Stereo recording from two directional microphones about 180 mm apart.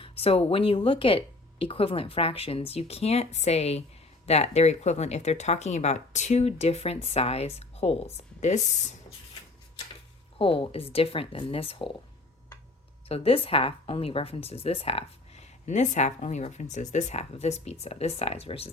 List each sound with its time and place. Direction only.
0.0 s speech: 35° left (ahead or behind)
10.3 s speech: 30° left (ahead or behind)
13.1 s speech: 30° left (ahead or behind)